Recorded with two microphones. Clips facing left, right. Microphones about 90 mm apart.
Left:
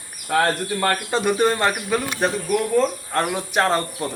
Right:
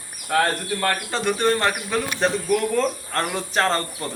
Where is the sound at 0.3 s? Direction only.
5° left (ahead or behind).